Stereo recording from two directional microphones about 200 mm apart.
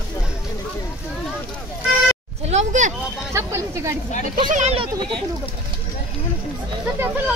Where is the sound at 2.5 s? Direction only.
40° right (ahead or behind).